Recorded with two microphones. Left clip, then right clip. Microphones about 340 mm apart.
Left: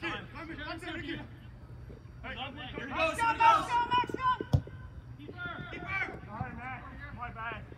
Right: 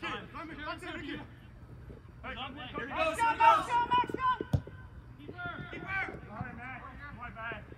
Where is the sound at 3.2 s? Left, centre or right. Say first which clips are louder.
Even; right.